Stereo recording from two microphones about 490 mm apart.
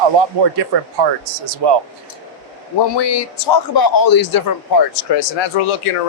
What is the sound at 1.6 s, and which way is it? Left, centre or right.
Speech, right.